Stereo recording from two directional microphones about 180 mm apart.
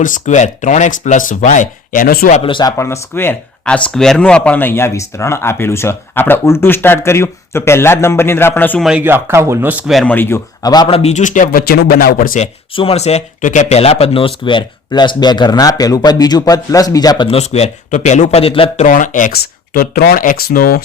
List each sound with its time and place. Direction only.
0.0 s speech: 45° left (ahead or behind)
2.4 s speech: 25° left (ahead or behind); by 8.8 s 10° left (ahead or behind)
8.8 s speech: 5° right (ahead or behind); by 11.6 s 45° left (ahead or behind)
11.7 s speech: 60° left (ahead or behind)
12.7 s speech: 30° left (ahead or behind)
17.2 s speech: 35° left (ahead or behind)
18.9 s speech: 45° left (ahead or behind)